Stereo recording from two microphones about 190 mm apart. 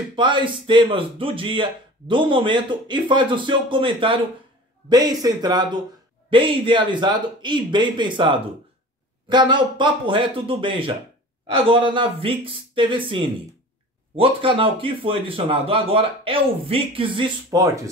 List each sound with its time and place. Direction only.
0.1 s speech: 25° right (ahead or behind)